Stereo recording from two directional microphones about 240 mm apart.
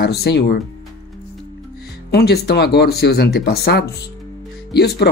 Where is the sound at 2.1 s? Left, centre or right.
Left.